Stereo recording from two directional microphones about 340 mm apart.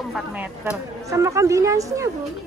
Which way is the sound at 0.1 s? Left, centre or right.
Centre.